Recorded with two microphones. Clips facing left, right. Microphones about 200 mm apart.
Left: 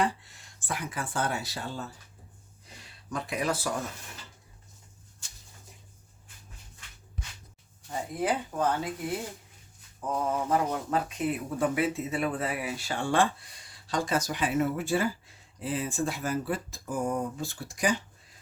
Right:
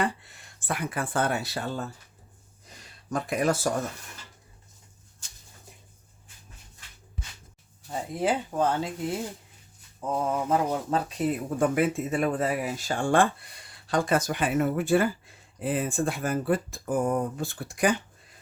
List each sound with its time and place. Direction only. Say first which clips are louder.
0.0 s speech: even; 60° right (ahead or behind)
7.9 s speech: right 2 dB; 25° right (ahead or behind)
10.1 s speech: right 2 dB; 25° right (ahead or behind); by 17.9 s 55° right (ahead or behind)